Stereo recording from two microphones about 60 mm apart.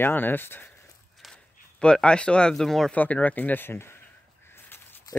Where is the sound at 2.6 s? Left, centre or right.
Centre.